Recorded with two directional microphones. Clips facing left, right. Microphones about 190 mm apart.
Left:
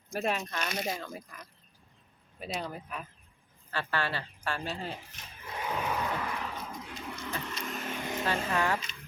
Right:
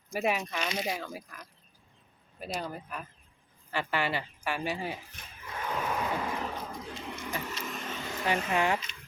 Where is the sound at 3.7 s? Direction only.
15° right (ahead or behind).